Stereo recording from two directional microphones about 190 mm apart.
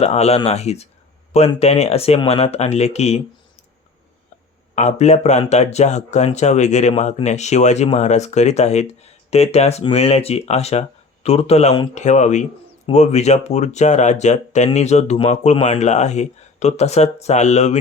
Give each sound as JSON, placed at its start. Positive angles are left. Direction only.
{"t": 0.0, "sound": "speech", "side_deg": 35}
{"t": 4.7, "sound": "speech", "side_deg": 40}